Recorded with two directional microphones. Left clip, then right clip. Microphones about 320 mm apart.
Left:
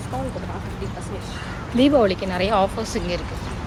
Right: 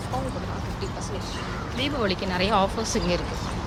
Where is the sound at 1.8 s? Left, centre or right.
Centre.